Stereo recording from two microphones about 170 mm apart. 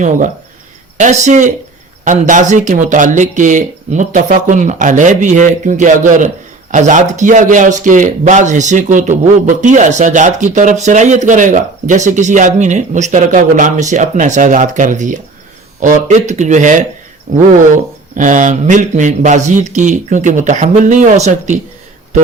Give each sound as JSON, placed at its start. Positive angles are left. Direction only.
{"t": 0.0, "sound": "speech", "side_deg": -45}